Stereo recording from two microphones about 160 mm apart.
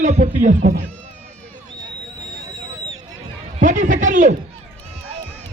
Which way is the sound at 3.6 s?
50° right (ahead or behind).